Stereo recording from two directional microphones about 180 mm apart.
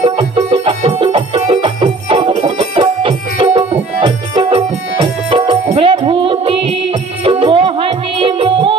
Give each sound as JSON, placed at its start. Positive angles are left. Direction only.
{"t": 0.0, "sound": "music", "side_deg": -30}